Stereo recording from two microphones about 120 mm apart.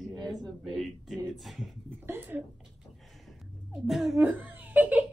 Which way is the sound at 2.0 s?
15° right (ahead or behind).